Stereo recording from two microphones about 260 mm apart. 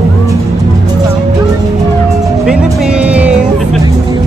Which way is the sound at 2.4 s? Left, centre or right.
Centre.